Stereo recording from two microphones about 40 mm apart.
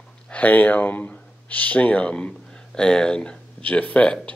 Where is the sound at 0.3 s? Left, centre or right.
Left.